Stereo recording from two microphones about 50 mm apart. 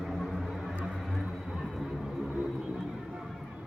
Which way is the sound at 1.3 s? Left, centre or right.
Centre.